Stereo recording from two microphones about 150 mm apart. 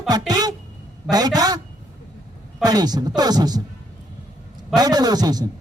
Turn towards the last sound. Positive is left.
turn(degrees=-25)  # may be behind; listen again after turning